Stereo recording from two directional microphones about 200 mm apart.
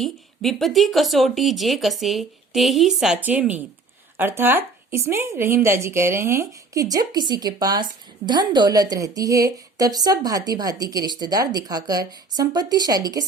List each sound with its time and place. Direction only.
0.0 s a woman's voice: centre (ahead or behind); by 13.2 s 20° right (ahead or behind)